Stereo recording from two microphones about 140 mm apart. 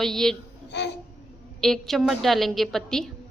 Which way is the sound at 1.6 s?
Centre (ahead or behind).